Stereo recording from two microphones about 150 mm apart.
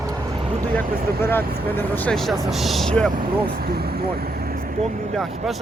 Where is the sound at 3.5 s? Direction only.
90° right; by 4.8 s 70° right (ahead or behind).